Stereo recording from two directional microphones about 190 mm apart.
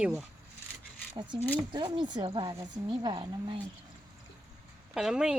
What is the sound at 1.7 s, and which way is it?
A woman's voice, 25° right (ahead or behind).